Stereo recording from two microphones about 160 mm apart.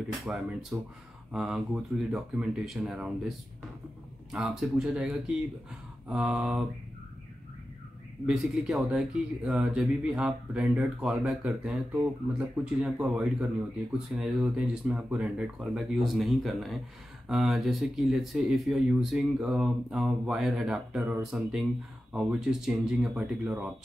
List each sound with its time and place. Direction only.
0.3 s speech: 5° right (ahead or behind)
8.3 s speech: 5° right (ahead or behind)